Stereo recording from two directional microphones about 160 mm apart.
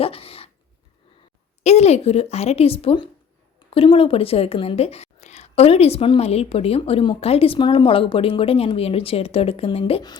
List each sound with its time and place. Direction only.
0.0 s dog: 35° left (ahead or behind)
1.6 s a woman's voice: 40° left (ahead or behind)